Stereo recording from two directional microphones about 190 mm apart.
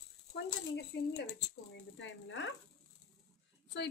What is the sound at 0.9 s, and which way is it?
Speech, 65° left (ahead or behind).